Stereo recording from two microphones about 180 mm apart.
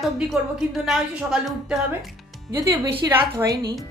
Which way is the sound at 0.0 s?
Centre (ahead or behind).